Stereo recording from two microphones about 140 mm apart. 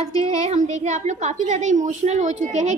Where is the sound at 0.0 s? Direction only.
50° right (ahead or behind).